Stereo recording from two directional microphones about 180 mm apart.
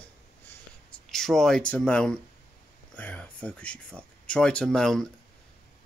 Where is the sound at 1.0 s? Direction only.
Centre (ahead or behind).